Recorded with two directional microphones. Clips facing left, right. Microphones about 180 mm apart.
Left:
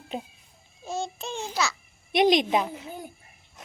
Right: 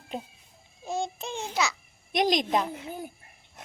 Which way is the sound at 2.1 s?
5° left (ahead or behind).